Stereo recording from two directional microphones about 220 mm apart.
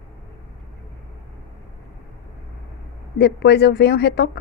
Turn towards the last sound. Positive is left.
turn(degrees=50)  # may be behind; listen again after turning